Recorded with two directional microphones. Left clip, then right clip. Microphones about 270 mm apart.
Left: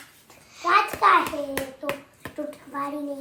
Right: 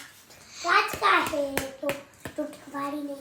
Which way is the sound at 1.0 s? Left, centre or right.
Centre.